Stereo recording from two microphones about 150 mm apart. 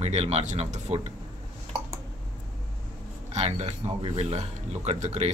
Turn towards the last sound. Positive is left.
turn(degrees=-45)  # may be behind; listen again after turning